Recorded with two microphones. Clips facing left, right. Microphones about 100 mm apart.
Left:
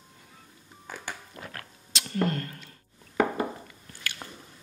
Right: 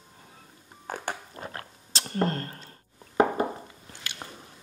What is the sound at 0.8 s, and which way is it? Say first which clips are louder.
Music: right 6 dB; 50° right (ahead or behind).